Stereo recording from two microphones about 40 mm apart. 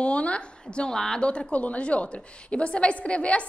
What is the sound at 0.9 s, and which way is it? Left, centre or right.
Speech, centre.